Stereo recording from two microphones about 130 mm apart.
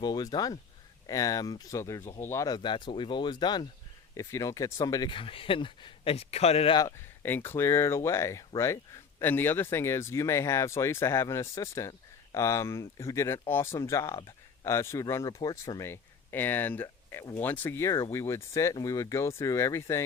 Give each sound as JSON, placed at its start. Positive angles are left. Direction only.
{"t": 0.0, "sound": "speech", "side_deg": 30}
{"t": 2.6, "sound": "speech", "side_deg": 40}
{"t": 4.1, "sound": "speech", "side_deg": 25}
{"t": 7.2, "sound": "speech", "side_deg": 15}